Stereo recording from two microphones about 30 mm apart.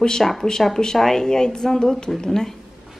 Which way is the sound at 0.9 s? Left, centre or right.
Centre.